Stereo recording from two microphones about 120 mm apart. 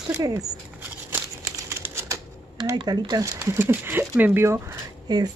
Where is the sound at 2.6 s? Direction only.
35° right (ahead or behind); by 4.6 s 20° right (ahead or behind).